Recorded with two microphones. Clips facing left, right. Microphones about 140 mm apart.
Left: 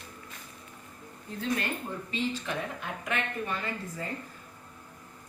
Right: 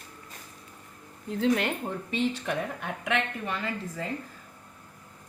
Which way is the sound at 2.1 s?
65° right (ahead or behind).